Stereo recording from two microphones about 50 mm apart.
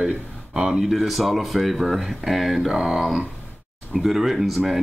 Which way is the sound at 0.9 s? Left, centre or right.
Centre.